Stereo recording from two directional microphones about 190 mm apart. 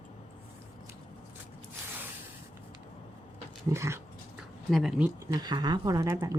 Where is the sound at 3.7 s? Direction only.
15° right (ahead or behind).